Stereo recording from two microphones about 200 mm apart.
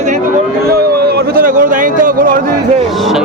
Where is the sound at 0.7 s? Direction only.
50° right (ahead or behind).